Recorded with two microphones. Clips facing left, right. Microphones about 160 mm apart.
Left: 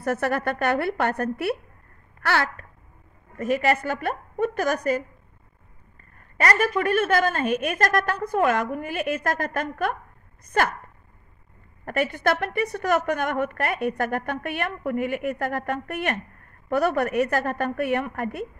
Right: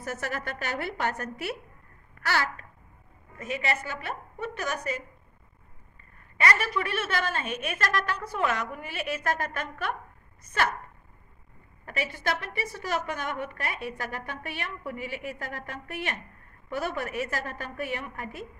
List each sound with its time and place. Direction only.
0.0 s a woman's voice: 60° left (ahead or behind)
6.3 s a woman's voice: 45° left (ahead or behind)
11.8 s a woman's voice: 55° left (ahead or behind)